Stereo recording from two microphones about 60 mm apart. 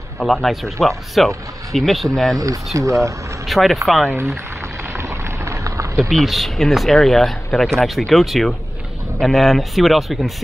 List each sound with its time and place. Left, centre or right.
0.2 s speech: centre
2.3 s speech: right
3.4 s speech: centre
4.9 s a sound: right
6.0 s speech: centre